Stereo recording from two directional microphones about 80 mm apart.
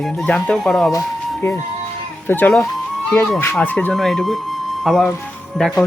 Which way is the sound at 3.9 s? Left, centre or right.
Centre.